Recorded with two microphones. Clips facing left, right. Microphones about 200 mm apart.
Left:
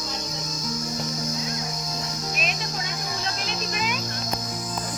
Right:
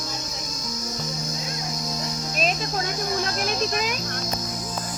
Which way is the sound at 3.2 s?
50° right (ahead or behind).